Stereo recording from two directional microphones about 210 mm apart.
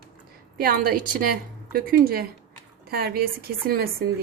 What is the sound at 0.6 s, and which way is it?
A woman's voice, 45° right (ahead or behind).